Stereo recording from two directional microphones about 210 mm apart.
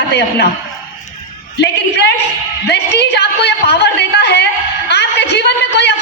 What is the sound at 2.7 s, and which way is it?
A man's voice, 55° left (ahead or behind).